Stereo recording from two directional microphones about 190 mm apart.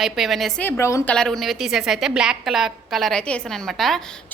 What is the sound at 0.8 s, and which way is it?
Speech, 15° left (ahead or behind).